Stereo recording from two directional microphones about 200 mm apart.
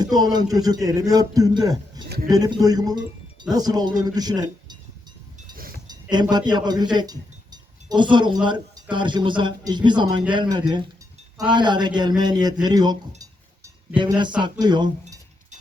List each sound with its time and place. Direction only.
0.0 s speech: 20° right (ahead or behind)
5.9 s a sound: 20° right (ahead or behind)
6.3 s speech: 20° right (ahead or behind)